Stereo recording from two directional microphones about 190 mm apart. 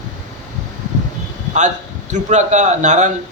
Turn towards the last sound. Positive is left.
turn(degrees=-40)  # may be behind; listen again after turning